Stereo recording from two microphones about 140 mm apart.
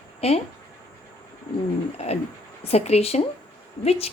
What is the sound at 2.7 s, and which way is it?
A woman's voice, 50° left (ahead or behind).